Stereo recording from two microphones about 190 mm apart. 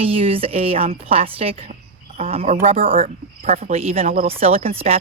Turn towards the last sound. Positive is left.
turn(degrees=-35)  # may be behind; listen again after turning